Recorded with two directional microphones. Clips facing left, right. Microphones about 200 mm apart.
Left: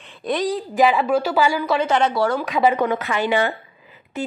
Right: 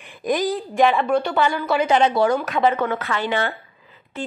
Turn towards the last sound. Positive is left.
turn(degrees=15)  # may be behind; listen again after turning